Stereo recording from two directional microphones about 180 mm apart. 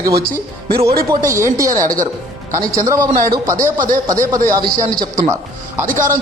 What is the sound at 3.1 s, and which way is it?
Speech, 50° right (ahead or behind).